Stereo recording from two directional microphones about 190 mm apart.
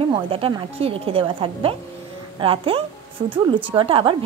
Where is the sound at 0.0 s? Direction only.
30° right (ahead or behind).